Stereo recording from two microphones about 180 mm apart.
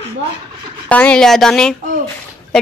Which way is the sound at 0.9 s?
5° left (ahead or behind).